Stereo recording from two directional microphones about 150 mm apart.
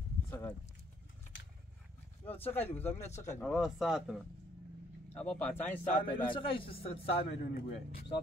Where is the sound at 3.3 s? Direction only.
Centre (ahead or behind).